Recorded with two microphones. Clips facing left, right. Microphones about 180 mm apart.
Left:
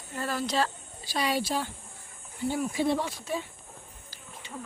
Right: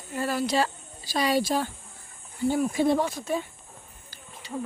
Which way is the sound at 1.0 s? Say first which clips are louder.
Right 4 dB; 40° right (ahead or behind).